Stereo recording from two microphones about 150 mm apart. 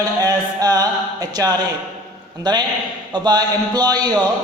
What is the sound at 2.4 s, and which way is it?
Speech, 30° right (ahead or behind).